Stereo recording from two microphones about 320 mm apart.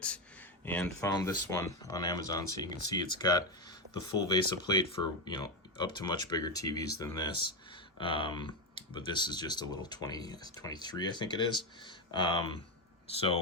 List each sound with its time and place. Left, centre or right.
0.6 s speech: centre